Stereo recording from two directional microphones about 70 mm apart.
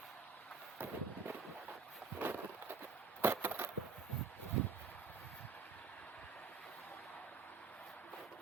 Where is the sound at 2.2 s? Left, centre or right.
Right.